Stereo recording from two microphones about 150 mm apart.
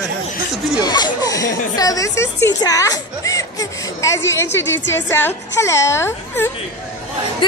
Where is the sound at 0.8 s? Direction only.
25° left (ahead or behind).